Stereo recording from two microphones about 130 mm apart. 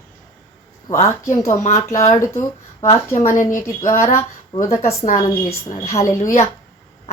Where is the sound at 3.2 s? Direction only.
80° left.